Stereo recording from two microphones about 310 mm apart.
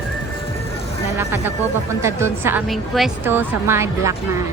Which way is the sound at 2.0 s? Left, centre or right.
Centre.